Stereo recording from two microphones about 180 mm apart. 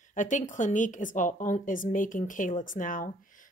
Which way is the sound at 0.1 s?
45° left (ahead or behind).